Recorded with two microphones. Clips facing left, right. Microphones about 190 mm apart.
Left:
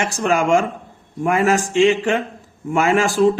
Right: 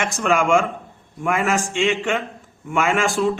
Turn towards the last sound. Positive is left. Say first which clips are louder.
# left 4 dB
turn(degrees=35)  # may be behind; listen again after turning